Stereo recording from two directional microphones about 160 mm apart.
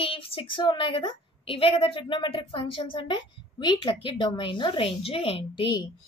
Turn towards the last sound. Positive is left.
turn(degrees=30)  # may be behind; listen again after turning